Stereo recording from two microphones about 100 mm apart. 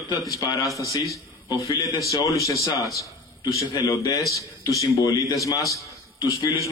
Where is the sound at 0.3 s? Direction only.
40° left (ahead or behind).